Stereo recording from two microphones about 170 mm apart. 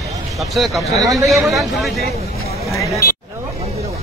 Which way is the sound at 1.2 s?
Centre (ahead or behind).